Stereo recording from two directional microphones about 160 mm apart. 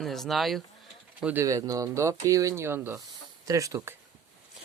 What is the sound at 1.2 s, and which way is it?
Speech, 15° right (ahead or behind).